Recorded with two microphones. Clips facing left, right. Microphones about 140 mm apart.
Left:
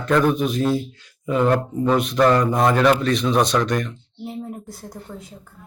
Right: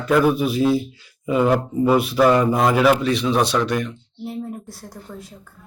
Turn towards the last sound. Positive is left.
turn(degrees=0)  # may be behind; listen again after turning